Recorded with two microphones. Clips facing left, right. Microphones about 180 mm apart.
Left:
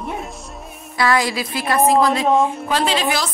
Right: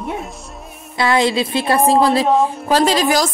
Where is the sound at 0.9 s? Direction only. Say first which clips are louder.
Right 3 dB; 25° right (ahead or behind).